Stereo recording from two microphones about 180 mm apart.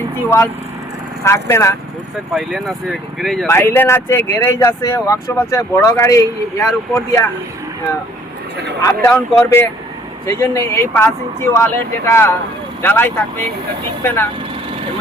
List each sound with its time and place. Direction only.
1.2 s speech: 15° left (ahead or behind)
2.3 s speech: centre (ahead or behind)
3.5 s speech: 10° left (ahead or behind)
8.8 s speech: 15° left (ahead or behind)